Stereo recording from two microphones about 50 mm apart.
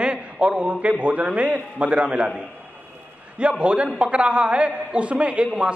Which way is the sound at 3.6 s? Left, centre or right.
Right.